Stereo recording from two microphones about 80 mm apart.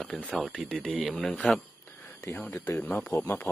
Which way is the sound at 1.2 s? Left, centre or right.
Centre.